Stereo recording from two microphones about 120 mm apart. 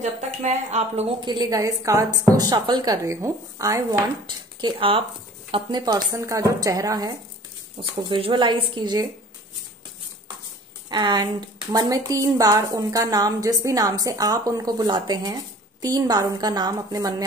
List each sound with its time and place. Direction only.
0.0 s a woman's voice: 75° right (ahead or behind)
1.2 s a woman's voice: 35° right (ahead or behind)
4.6 s a woman's voice: 45° right (ahead or behind)
7.8 s a woman's voice: 45° right (ahead or behind)
10.9 s a woman's voice: 35° right (ahead or behind)